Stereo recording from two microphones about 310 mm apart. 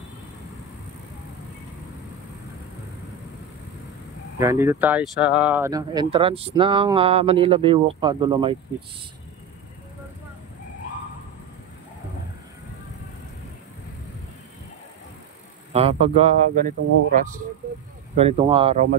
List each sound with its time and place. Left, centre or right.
4.4 s speech: centre
15.7 s speech: centre